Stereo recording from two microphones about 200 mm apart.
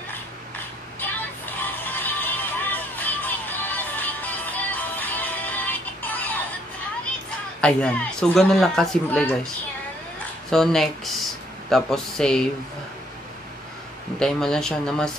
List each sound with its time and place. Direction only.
1.6 s music: 10° left (ahead or behind)
7.6 s speech: 5° left (ahead or behind)
10.5 s speech: centre (ahead or behind)
14.2 s speech: 5° left (ahead or behind)